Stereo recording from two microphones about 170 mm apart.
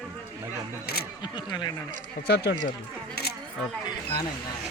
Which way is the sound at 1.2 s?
25° left (ahead or behind).